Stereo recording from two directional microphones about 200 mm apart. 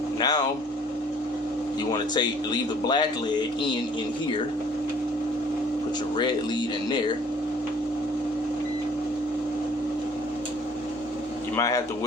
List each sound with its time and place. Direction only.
1.9 s speech: 20° left (ahead or behind)
11.5 s speech: 15° left (ahead or behind)